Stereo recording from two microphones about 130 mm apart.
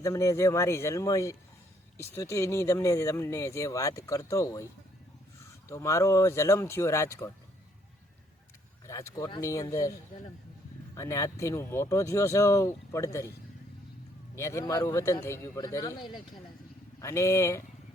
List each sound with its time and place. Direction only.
0.0 s speech: 25° left (ahead or behind)
8.9 s speech: 25° left (ahead or behind)
10.9 s speech: 25° left (ahead or behind)
14.3 s a man's voice: 20° left (ahead or behind)
17.0 s speech: 20° left (ahead or behind)